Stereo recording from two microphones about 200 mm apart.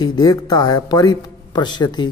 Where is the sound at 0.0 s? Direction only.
20° left (ahead or behind).